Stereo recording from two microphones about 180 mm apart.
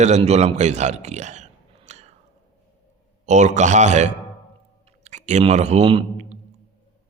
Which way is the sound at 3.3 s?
40° right (ahead or behind).